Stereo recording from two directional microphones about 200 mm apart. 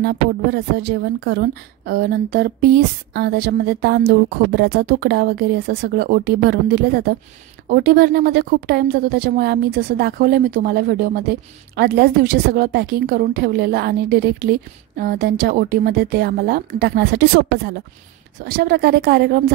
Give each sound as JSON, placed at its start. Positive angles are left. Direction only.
{"t": 0.0, "sound": "a woman's voice", "side_deg": -55}